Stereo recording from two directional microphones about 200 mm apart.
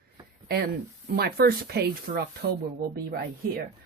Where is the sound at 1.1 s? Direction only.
50° right (ahead or behind).